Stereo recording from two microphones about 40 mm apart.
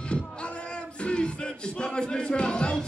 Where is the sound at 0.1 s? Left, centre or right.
Left.